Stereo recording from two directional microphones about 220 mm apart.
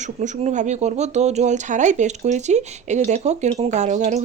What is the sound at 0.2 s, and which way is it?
Speech, 35° right (ahead or behind).